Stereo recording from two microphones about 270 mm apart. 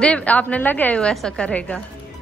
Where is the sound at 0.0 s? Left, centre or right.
Centre.